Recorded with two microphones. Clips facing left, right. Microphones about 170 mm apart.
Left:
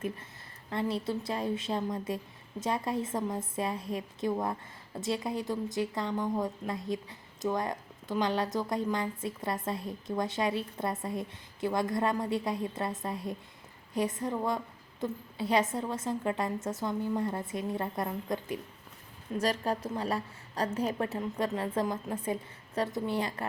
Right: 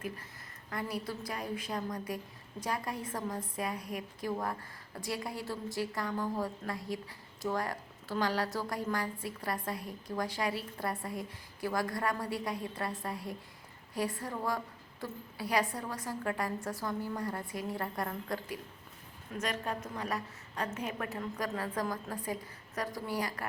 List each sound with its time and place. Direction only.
0.7 s a woman's voice: 25° left (ahead or behind)
19.3 s a woman's voice: 35° left (ahead or behind)